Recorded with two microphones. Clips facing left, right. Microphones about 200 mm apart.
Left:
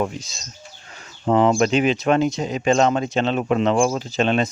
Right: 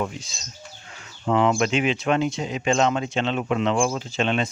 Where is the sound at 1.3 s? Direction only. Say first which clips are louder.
Left 4 dB; 35° left (ahead or behind).